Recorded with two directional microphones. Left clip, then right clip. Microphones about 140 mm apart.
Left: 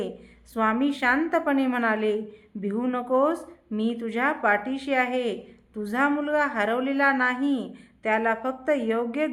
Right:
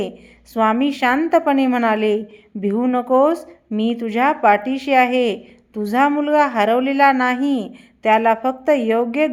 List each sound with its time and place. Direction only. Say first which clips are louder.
0.5 s a woman's voice: right 7 dB; 35° right (ahead or behind)